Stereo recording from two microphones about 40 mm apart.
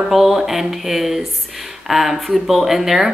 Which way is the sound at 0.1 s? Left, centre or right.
Centre.